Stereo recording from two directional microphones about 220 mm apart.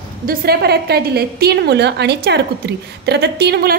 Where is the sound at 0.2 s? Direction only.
40° right (ahead or behind).